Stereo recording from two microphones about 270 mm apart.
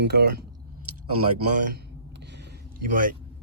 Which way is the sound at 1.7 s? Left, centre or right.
Right.